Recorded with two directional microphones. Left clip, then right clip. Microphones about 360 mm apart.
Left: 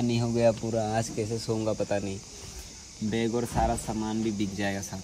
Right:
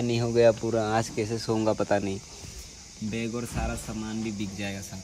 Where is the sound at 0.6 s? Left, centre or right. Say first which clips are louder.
Right 3 dB; right.